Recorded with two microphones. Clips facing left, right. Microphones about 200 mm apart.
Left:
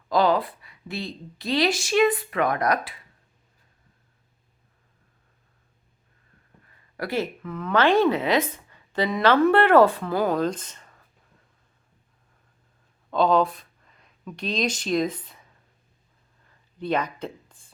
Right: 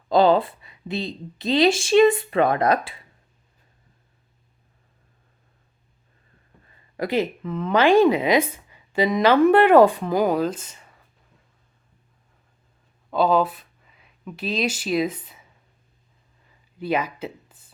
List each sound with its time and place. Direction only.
0.1 s a woman's voice: 25° right (ahead or behind)
6.9 s speech: 20° right (ahead or behind)
13.1 s speech: 5° right (ahead or behind)
16.5 s a sound: 5° right (ahead or behind)